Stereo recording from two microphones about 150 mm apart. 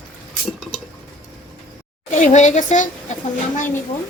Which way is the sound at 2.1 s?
55° left (ahead or behind).